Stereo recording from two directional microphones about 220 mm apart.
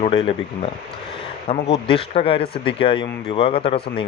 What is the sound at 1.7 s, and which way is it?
Speech, 25° left (ahead or behind).